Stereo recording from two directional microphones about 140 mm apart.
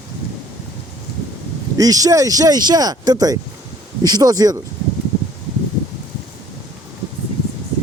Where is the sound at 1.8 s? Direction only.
25° right (ahead or behind).